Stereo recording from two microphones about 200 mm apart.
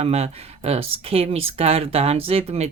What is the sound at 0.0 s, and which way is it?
Speech, 30° right (ahead or behind).